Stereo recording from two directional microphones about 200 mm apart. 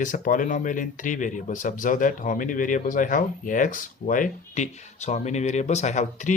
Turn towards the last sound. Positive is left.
turn(degrees=35)  # may be behind; listen again after turning